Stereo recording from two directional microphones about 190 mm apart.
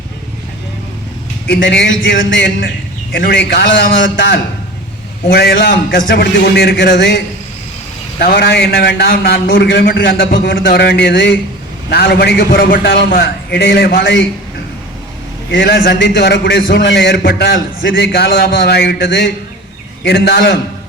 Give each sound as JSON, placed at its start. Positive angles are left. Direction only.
{"t": 1.5, "sound": "a man's voice", "side_deg": 60}
{"t": 8.2, "sound": "a man's voice", "side_deg": 55}
{"t": 11.9, "sound": "a man's voice", "side_deg": 55}
{"t": 15.5, "sound": "a man's voice", "side_deg": 55}